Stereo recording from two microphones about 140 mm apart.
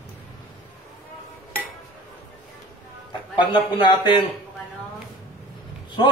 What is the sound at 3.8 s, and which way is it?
Speech, 35° left (ahead or behind).